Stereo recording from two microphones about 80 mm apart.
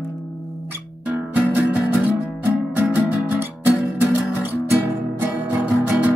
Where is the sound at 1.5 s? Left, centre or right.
Right.